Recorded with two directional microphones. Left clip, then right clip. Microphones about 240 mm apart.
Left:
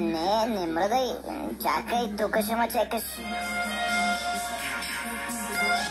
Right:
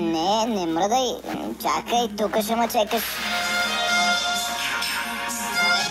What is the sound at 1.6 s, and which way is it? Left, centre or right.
Music, right.